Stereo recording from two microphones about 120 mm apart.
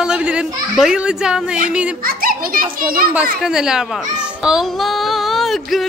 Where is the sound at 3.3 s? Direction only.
5° right (ahead or behind).